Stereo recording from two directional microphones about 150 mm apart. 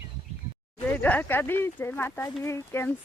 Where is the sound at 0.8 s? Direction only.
10° left (ahead or behind).